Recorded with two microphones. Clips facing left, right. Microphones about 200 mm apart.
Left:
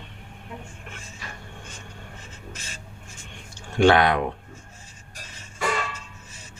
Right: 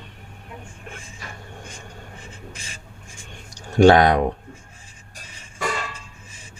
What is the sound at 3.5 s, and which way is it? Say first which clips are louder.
Speech: right 5 dB; 40° right (ahead or behind).